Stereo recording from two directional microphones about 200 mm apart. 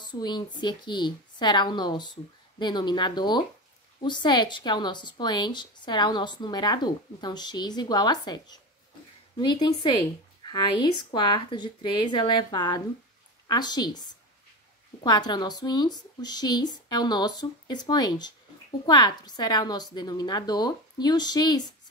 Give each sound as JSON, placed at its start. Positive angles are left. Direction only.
{"t": 0.0, "sound": "a woman's voice", "side_deg": 20}
{"t": 15.0, "sound": "a woman's voice", "side_deg": 20}